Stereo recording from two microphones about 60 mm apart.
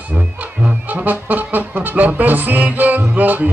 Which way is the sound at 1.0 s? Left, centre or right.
Right.